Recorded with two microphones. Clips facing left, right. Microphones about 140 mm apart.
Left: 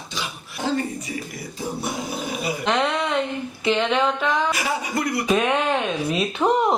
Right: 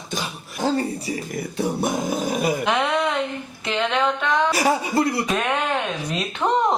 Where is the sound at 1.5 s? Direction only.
50° right (ahead or behind).